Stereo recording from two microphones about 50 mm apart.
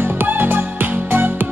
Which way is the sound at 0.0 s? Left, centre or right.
Right.